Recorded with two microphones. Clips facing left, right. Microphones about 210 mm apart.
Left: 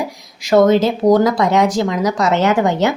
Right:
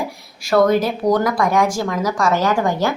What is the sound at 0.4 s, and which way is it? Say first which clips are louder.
A woman's voice: left 3 dB; 20° left (ahead or behind).